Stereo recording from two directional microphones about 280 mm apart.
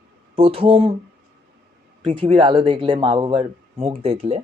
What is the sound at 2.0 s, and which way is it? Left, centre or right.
Speech, centre.